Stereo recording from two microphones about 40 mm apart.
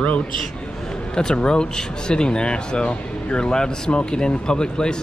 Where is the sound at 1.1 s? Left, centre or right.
Centre.